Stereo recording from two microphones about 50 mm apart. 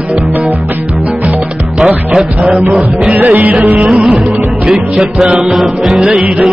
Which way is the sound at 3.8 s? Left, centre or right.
Centre.